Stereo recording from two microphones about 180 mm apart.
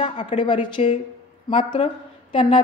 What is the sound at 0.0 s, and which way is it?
A woman's voice, 30° left (ahead or behind).